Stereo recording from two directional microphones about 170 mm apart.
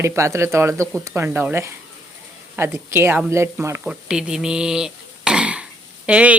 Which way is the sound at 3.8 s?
5° right (ahead or behind).